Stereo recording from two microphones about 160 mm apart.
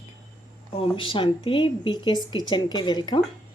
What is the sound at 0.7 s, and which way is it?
Speech, 35° left (ahead or behind).